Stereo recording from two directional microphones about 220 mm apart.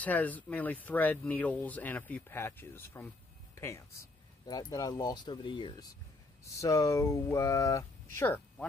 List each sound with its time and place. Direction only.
0.0 s speech: 5° left (ahead or behind)